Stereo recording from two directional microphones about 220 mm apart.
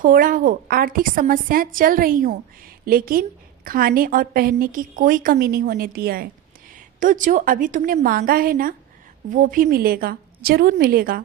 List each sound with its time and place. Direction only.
0.0 s a woman's voice: 40° right (ahead or behind)